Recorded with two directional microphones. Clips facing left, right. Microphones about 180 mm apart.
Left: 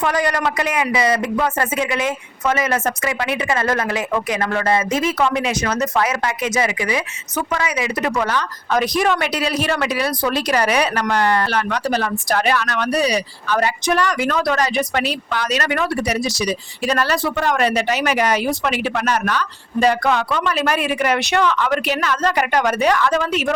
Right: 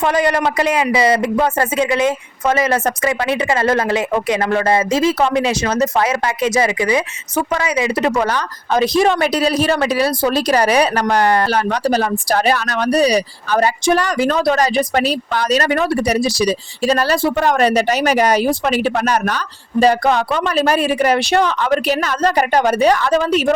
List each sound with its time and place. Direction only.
0.0 s a woman's voice: 25° right (ahead or behind)
8.8 s a woman's voice: 25° right (ahead or behind)